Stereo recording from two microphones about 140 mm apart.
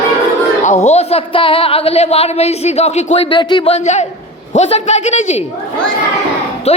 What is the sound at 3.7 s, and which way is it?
Speech, 55° left (ahead or behind).